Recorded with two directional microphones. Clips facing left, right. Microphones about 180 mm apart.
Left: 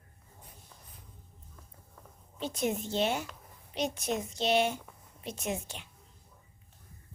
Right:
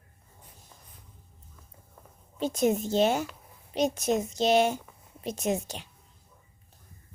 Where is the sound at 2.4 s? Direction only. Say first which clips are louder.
Right 7 dB; 45° right (ahead or behind).